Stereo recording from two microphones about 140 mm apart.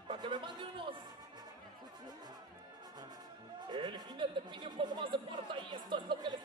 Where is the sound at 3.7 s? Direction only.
35° right (ahead or behind).